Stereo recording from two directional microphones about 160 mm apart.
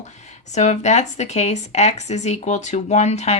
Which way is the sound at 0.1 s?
45° left (ahead or behind).